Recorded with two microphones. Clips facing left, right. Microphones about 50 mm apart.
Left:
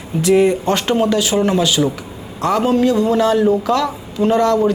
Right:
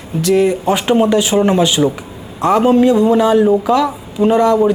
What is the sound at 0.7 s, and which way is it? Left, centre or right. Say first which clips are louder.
A man's voice: right 3 dB; centre.